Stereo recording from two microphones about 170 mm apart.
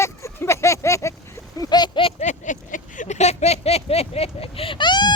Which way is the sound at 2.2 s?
45° left (ahead or behind).